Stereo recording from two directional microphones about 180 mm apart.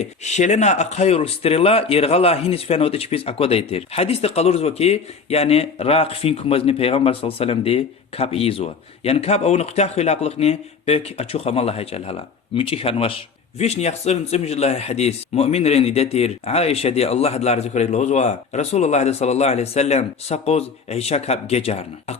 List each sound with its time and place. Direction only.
0.0 s speech: 40° left (ahead or behind)